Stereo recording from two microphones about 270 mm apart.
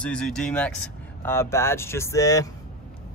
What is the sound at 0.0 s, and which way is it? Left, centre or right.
Speech, centre.